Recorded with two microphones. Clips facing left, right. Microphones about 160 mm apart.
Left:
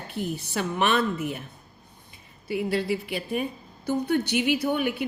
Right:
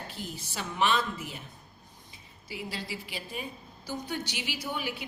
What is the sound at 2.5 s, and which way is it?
A woman's voice, 60° left (ahead or behind).